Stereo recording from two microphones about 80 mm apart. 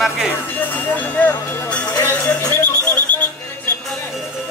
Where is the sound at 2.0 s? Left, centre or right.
Left.